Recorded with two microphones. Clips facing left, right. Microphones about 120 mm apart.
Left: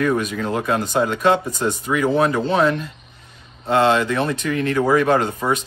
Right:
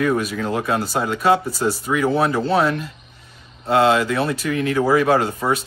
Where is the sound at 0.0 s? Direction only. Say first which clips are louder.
Even; 5° right (ahead or behind).